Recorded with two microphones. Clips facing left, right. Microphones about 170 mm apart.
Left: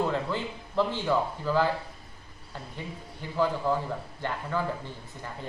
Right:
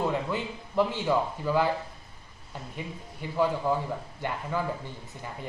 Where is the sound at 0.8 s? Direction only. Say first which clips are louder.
Right 1 dB; 15° right (ahead or behind).